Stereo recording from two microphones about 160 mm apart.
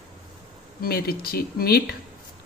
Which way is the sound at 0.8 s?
70° left (ahead or behind).